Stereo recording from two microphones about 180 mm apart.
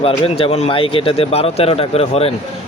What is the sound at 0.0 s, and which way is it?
Speech, 30° left (ahead or behind).